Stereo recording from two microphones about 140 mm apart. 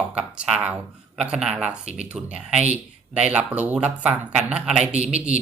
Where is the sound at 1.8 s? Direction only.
50° right (ahead or behind).